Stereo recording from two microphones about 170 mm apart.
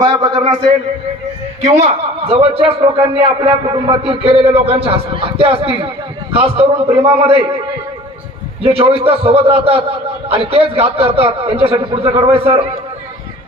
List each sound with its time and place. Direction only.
0.0 s a man's voice: 25° right (ahead or behind)
1.6 s a man's voice: 40° right (ahead or behind)
8.6 s a man's voice: 35° right (ahead or behind)